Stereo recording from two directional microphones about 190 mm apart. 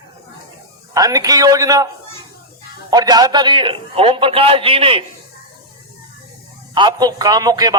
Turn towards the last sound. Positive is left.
turn(degrees=-20)  # may be behind; listen again after turning